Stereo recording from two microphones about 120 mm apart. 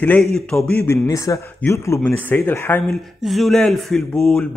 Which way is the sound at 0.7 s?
25° left (ahead or behind).